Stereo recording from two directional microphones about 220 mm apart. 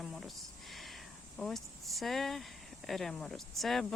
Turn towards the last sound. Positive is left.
turn(degrees=0)  # may be behind; listen again after turning